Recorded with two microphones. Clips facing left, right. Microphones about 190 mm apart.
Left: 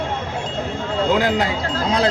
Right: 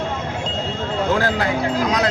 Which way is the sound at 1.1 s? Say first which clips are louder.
Left 2 dB; 20° left (ahead or behind).